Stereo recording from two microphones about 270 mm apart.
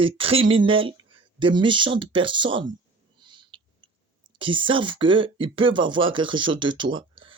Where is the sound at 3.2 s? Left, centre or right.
Centre.